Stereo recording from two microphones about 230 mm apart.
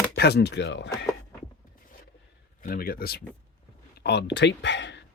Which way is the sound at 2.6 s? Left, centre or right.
Left.